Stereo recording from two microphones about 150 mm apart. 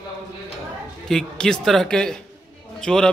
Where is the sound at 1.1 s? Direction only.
5° left (ahead or behind).